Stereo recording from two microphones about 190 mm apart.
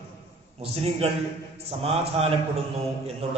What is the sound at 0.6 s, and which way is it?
A man's voice, 30° right (ahead or behind).